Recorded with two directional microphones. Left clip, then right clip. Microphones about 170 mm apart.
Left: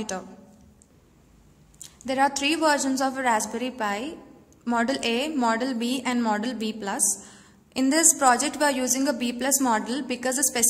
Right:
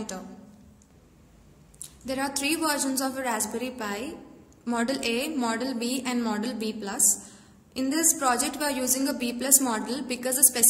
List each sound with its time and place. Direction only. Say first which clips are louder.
1.8 s a woman's voice: left 8 dB; 35° left (ahead or behind)